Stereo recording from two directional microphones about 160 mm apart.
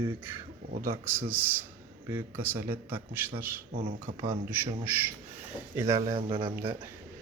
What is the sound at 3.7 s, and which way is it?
Speech, 60° right (ahead or behind).